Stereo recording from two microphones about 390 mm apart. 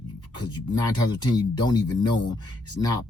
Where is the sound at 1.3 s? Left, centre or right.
Centre.